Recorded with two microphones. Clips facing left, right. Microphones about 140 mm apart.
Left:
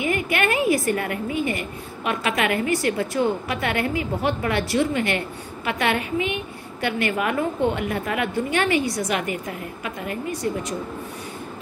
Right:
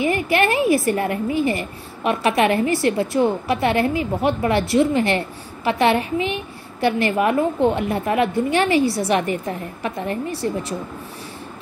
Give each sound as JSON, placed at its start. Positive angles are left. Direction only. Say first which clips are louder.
{"t": 0.0, "sound": "a woman's voice", "louder": "right 4 dB", "side_deg": -30}